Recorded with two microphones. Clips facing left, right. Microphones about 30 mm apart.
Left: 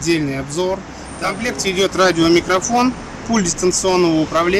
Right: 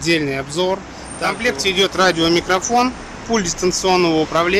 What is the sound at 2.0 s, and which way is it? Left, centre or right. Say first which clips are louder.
Speech: left 4 dB; centre.